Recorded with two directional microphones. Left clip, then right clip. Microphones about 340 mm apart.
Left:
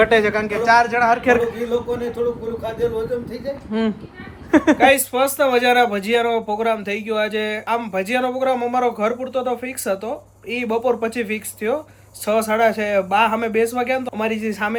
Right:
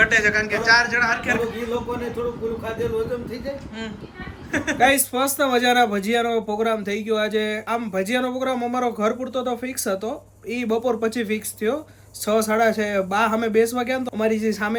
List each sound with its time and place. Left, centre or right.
0.0 s speech: centre
2.6 s speech: centre
3.7 s speech: centre
4.8 s speech: centre